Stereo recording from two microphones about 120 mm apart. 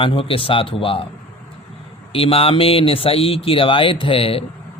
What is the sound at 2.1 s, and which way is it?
A man's voice, 50° left (ahead or behind).